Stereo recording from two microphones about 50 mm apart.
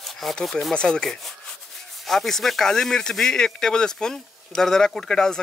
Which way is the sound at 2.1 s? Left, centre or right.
Centre.